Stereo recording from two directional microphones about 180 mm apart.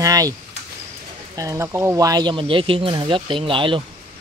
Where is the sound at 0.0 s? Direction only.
20° right (ahead or behind).